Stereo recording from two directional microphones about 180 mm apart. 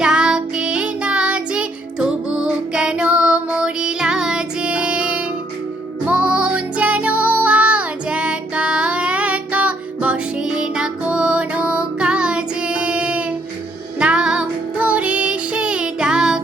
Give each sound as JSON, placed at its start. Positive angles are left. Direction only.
{"t": 0.0, "sound": "music", "side_deg": -5}